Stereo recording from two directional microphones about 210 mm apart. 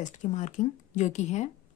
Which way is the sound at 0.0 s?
35° left (ahead or behind).